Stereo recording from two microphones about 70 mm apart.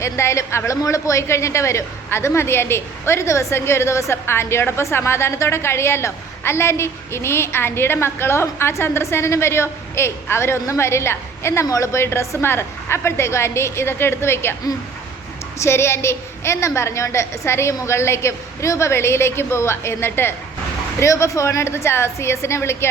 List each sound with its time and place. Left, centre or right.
0.0 s a woman's voice: left
15.5 s a woman's voice: left
21.0 s a woman's voice: left